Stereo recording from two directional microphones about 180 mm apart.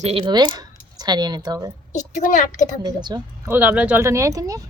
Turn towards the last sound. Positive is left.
turn(degrees=-20)  # may be behind; listen again after turning